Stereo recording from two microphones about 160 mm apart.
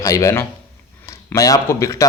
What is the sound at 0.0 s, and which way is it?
Speech, 20° left (ahead or behind).